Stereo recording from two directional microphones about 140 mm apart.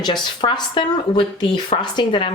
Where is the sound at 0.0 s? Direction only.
30° left (ahead or behind).